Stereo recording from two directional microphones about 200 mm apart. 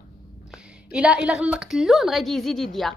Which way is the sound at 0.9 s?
5° right (ahead or behind).